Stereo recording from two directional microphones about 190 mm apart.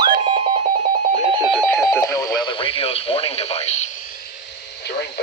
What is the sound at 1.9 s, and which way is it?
Radio, 20° left (ahead or behind).